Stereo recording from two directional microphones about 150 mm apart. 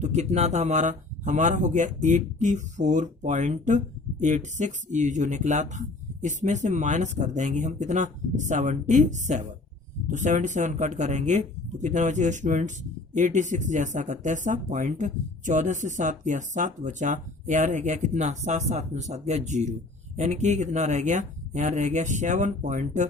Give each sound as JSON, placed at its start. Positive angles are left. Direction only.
{"t": 0.0, "sound": "speech", "side_deg": -50}